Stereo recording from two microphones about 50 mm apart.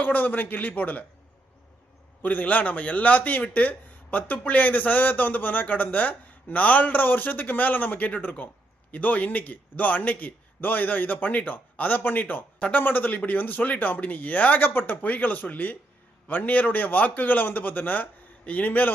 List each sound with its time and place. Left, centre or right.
0.0 s a man's voice: left
2.2 s a man's voice: left